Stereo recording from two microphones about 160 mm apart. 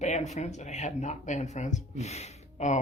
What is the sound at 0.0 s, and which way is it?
Speech, 45° left (ahead or behind).